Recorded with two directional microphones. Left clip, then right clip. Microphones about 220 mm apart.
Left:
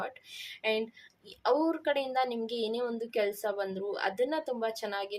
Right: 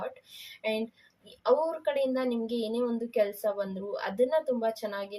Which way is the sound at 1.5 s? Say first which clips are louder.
Right 2 dB; 55° left (ahead or behind).